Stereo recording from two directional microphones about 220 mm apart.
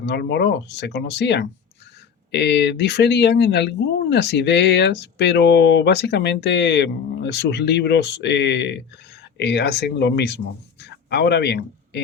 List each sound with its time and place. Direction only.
0.0 s speech: 50° left (ahead or behind)